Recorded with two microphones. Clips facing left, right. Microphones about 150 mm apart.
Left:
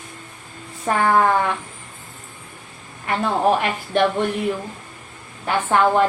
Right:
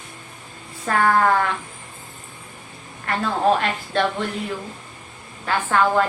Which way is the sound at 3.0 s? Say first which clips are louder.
Left 1 dB; 15° left (ahead or behind).